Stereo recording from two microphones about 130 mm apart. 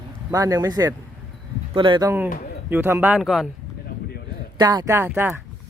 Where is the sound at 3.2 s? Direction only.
Centre (ahead or behind).